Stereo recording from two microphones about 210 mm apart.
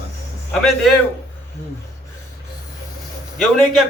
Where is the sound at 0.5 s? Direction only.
Centre (ahead or behind).